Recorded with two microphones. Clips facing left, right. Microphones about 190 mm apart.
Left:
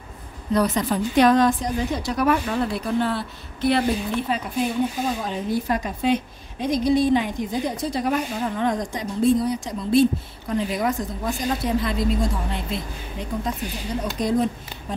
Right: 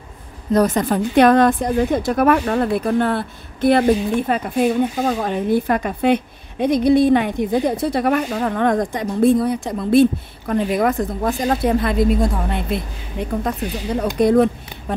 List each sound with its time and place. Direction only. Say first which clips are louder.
0.5 s speech: right 5 dB; 45° right (ahead or behind); by 15.0 s 60° right (ahead or behind)